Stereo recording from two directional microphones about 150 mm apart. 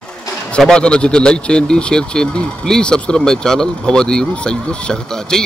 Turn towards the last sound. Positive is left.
turn(degrees=5)  # may be behind; listen again after turning